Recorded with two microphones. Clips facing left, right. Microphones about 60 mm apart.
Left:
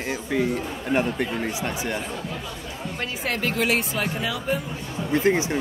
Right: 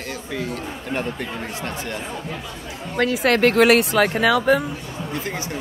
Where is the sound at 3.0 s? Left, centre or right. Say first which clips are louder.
Right 11 dB; right.